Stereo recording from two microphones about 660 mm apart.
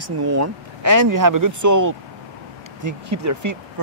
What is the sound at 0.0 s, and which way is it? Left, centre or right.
Speech, right.